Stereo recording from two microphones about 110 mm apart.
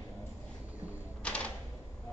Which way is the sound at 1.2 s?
10° left (ahead or behind).